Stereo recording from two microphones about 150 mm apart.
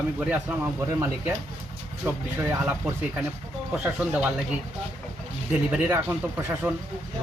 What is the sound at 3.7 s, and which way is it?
Speech, 5° right (ahead or behind).